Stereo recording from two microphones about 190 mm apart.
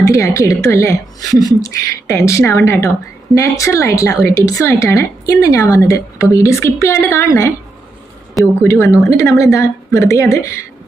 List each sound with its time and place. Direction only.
0.0 s speech: 15° left (ahead or behind)
8.6 s speech: 15° left (ahead or behind)